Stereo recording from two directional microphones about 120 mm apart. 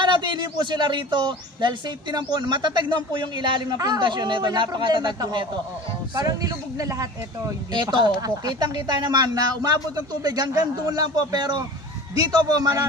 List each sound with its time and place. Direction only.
0.0 s speech: 40° right (ahead or behind)